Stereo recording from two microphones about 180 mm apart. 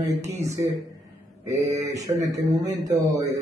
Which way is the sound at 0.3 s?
15° right (ahead or behind).